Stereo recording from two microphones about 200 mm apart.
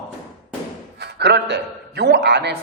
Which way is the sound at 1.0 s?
55° right (ahead or behind).